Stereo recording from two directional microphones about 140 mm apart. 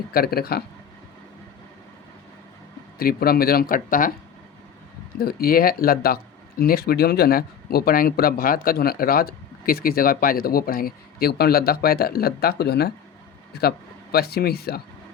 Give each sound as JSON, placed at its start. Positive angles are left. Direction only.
{"t": 0.1, "sound": "speech", "side_deg": 90}
{"t": 3.0, "sound": "speech", "side_deg": 90}
{"t": 5.2, "sound": "speech", "side_deg": 90}
{"t": 14.2, "sound": "speech", "side_deg": 90}